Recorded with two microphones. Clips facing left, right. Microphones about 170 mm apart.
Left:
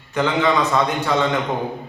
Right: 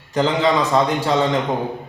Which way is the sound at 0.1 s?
35° right (ahead or behind).